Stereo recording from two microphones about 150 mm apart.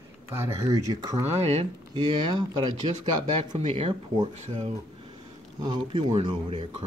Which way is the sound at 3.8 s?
35° right (ahead or behind).